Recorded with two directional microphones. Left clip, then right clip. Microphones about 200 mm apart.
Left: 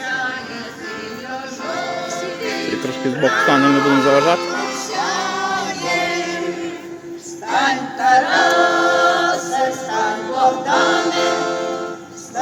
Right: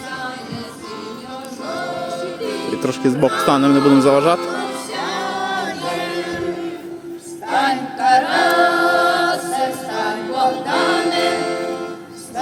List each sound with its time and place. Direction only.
2.8 s music: 30° right (ahead or behind)
4.4 s music: 5° right (ahead or behind)
7.5 s a capella: 20° right (ahead or behind)